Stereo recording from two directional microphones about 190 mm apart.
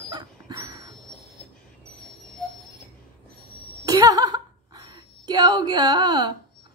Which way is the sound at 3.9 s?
20° right (ahead or behind).